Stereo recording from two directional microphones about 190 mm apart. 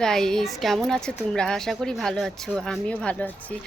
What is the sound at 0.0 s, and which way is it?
Speech, 5° left (ahead or behind).